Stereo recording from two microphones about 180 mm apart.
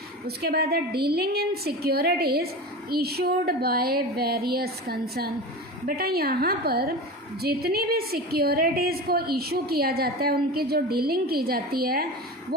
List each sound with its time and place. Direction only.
0.3 s a woman's voice: 60° right (ahead or behind)